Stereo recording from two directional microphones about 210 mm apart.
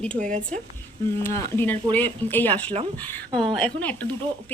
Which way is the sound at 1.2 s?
10° left (ahead or behind).